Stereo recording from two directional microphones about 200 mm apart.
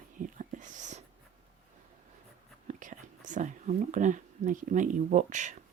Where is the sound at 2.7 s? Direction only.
40° right (ahead or behind).